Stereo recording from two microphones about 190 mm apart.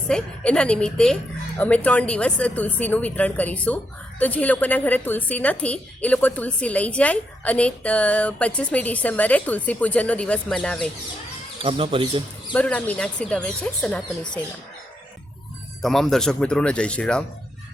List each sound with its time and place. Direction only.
0.1 s a woman's voice: 5° left (ahead or behind)
11.6 s speech: 30° right (ahead or behind)
12.5 s speech: 5° left (ahead or behind)
15.8 s speech: centre (ahead or behind)